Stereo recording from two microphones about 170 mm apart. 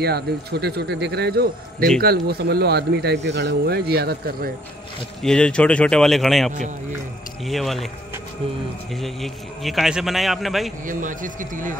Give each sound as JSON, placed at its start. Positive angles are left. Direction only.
{"t": 0.0, "sound": "speech", "side_deg": -70}
{"t": 5.2, "sound": "a man's voice", "side_deg": 5}
{"t": 8.9, "sound": "a man's voice", "side_deg": 0}
{"t": 10.9, "sound": "speech", "side_deg": -50}